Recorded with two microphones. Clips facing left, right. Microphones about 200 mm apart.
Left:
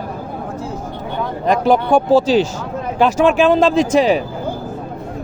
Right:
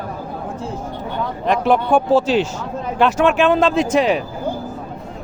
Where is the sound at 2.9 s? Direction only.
Centre (ahead or behind).